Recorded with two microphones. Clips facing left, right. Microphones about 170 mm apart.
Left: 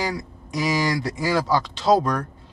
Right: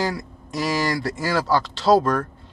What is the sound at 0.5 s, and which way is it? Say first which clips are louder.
Speech: even; 15° left (ahead or behind).